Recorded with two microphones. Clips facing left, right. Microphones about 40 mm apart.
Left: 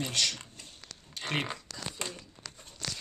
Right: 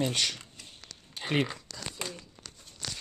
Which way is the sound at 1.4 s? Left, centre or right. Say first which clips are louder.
Right 2 dB; centre.